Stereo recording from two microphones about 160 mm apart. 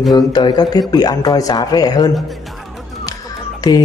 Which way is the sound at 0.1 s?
25° left (ahead or behind).